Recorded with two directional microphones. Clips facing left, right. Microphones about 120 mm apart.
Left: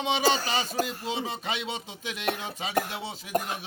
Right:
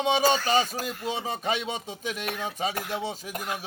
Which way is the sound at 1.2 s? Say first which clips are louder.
Right 3 dB; 45° right (ahead or behind).